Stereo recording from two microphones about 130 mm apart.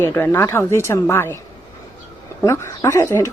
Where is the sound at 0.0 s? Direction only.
20° left (ahead or behind).